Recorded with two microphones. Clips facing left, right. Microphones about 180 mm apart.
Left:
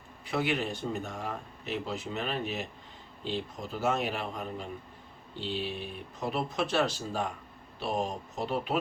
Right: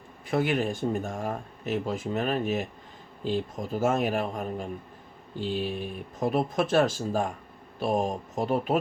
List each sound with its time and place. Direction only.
0.3 s speech: 45° right (ahead or behind)